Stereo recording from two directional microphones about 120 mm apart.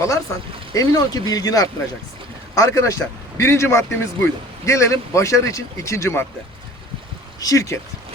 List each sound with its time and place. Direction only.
0.7 s a man's voice: 30° left (ahead or behind)
7.3 s speech: 30° left (ahead or behind)